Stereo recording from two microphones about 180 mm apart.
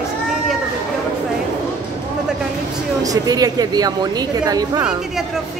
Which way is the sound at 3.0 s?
20° right (ahead or behind).